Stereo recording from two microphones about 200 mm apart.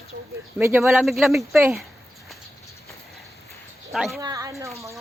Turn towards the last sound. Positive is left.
turn(degrees=-15)  # may be behind; listen again after turning